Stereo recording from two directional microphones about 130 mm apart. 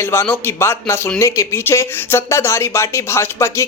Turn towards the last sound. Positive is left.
turn(degrees=20)  # may be behind; listen again after turning